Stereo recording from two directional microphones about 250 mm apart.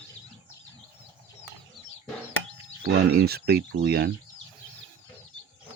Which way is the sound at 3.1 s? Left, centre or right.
Right.